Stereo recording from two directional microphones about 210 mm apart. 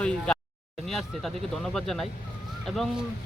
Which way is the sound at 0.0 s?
5° left (ahead or behind).